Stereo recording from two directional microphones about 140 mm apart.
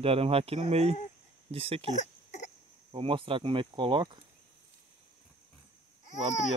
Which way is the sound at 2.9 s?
40° right (ahead or behind).